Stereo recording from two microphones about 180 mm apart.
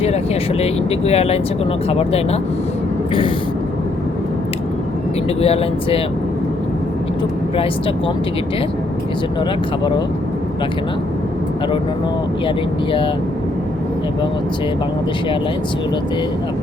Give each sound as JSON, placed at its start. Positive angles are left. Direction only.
{"t": 0.6, "sound": "speech", "side_deg": 35}
{"t": 5.4, "sound": "speech", "side_deg": 35}
{"t": 7.5, "sound": "speech", "side_deg": 30}